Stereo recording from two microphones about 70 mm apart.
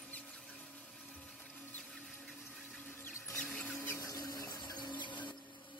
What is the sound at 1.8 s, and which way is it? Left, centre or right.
Music, centre.